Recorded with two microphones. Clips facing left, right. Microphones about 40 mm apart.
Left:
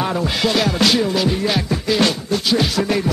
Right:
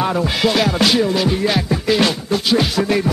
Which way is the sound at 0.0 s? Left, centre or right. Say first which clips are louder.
Right 2 dB; centre.